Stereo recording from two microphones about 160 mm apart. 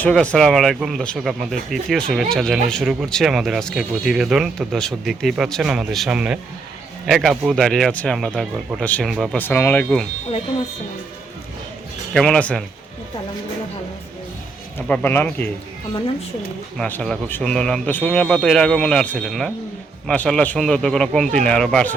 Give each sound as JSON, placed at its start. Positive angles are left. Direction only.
{"t": 0.0, "sound": "speech", "side_deg": 5}
{"t": 9.1, "sound": "speech", "side_deg": 0}
{"t": 9.4, "sound": "speech", "side_deg": 10}
{"t": 12.1, "sound": "speech", "side_deg": 5}
{"t": 14.8, "sound": "speech", "side_deg": 10}
{"t": 16.7, "sound": "speech", "side_deg": 10}